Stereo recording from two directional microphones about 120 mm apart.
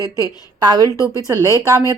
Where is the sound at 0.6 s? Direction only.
35° right (ahead or behind).